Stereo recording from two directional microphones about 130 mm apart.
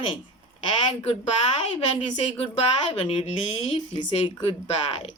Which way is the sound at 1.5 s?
50° left (ahead or behind).